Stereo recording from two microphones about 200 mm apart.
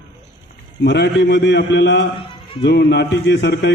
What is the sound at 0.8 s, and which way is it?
A man's voice, 60° left (ahead or behind).